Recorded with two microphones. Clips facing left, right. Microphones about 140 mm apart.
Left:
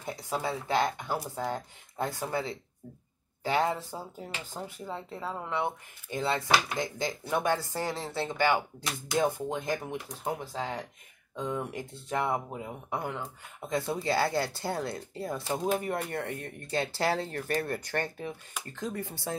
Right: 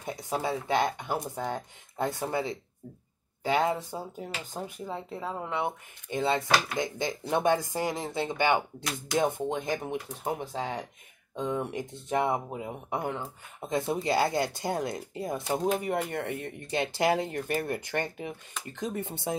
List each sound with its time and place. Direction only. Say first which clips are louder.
0.0 s speech: right 2 dB; 20° right (ahead or behind)